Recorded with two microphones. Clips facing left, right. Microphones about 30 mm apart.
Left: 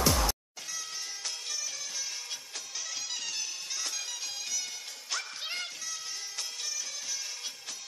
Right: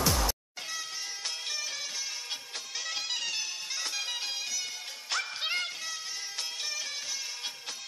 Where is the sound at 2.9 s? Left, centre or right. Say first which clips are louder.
Right 4 dB; right.